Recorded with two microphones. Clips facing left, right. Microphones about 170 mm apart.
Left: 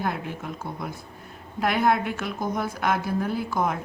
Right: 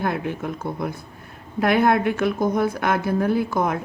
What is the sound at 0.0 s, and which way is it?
A woman's voice, 55° right (ahead or behind).